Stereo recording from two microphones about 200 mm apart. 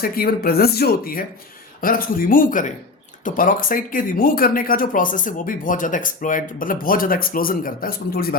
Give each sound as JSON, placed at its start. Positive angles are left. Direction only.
{"t": 0.0, "sound": "speech", "side_deg": 50}